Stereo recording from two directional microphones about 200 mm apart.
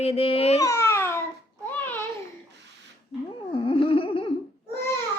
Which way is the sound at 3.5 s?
25° left (ahead or behind).